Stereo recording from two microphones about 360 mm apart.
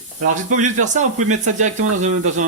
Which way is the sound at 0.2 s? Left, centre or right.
Right.